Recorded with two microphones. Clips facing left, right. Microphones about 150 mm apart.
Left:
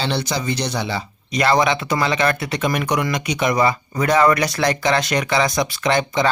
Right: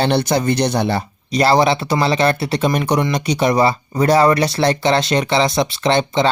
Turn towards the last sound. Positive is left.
turn(degrees=-25)  # may be behind; listen again after turning